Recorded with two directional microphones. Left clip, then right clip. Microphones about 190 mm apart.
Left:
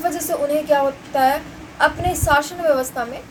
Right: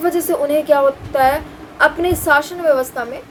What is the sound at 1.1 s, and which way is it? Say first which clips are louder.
A woman's voice: right 3 dB; 15° right (ahead or behind).